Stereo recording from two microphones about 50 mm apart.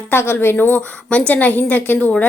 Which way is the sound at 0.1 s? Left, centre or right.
Left.